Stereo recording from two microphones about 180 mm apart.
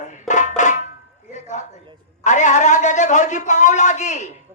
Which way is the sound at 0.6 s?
45° left (ahead or behind).